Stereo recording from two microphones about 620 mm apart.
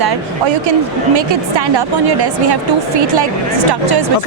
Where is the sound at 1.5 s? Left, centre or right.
Right.